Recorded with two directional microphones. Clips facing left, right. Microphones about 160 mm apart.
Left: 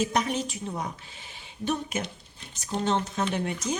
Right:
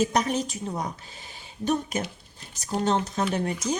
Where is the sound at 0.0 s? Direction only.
40° right (ahead or behind).